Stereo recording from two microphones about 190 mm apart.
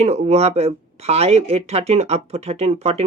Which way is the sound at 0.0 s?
35° right (ahead or behind).